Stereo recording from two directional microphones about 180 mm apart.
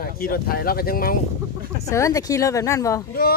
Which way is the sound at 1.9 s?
20° left (ahead or behind).